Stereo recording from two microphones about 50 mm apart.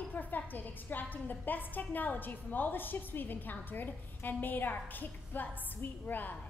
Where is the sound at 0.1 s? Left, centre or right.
Left.